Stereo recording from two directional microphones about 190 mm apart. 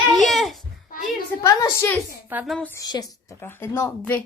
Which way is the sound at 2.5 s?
10° left (ahead or behind).